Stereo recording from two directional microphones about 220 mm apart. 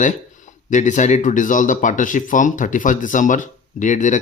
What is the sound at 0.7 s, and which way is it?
Speech, 35° left (ahead or behind).